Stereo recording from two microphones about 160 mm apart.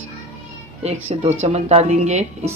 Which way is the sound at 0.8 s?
45° right (ahead or behind).